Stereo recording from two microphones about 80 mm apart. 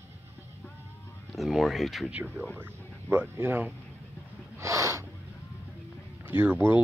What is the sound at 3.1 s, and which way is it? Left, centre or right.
Speech, right.